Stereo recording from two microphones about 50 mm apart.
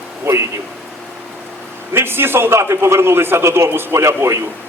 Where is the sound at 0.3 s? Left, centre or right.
Right.